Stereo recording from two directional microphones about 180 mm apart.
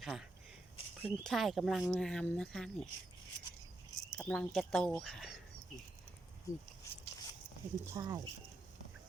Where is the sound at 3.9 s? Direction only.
5° left (ahead or behind).